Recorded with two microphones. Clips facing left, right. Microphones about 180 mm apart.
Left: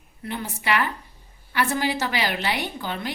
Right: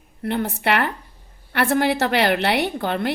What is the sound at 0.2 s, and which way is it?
A woman's voice, 60° right (ahead or behind).